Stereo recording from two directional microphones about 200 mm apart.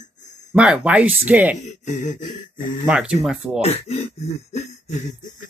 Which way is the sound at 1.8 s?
35° left (ahead or behind).